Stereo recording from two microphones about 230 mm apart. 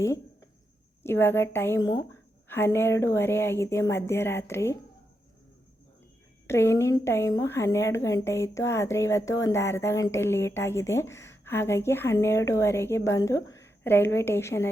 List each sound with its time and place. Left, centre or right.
1.0 s a woman's voice: centre
6.5 s a woman's voice: centre